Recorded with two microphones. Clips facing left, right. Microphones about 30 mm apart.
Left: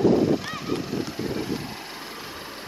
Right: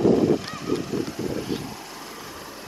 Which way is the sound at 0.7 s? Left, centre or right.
Left.